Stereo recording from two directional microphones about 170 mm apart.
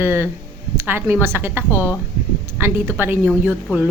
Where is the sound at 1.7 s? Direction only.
15° left (ahead or behind).